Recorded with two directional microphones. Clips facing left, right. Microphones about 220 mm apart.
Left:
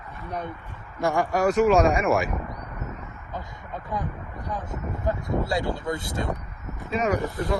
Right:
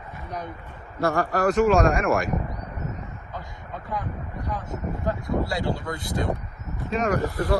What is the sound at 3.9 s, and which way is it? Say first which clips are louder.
Speech: even; 20° left (ahead or behind).